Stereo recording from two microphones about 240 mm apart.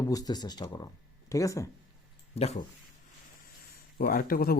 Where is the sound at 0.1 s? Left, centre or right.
Centre.